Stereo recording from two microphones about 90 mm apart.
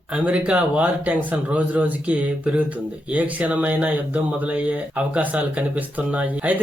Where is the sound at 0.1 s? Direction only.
15° right (ahead or behind).